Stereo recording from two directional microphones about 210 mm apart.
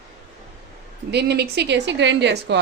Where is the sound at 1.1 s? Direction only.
50° right (ahead or behind).